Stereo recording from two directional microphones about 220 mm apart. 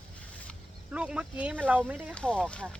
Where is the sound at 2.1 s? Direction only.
5° left (ahead or behind).